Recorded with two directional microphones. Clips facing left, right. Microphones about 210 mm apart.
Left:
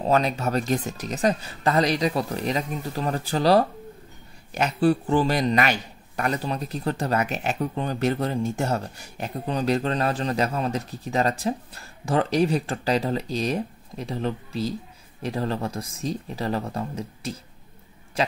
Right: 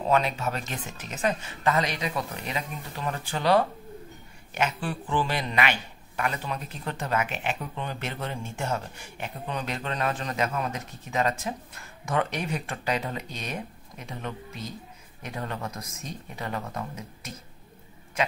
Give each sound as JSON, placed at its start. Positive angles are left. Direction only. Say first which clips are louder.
{"t": 0.0, "sound": "a man's voice", "louder": "left 3 dB", "side_deg": 40}